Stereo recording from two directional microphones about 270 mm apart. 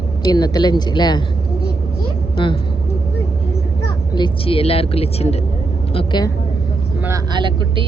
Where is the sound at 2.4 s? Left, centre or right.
Centre.